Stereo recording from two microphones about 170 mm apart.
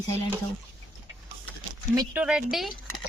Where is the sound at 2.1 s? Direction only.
5° right (ahead or behind).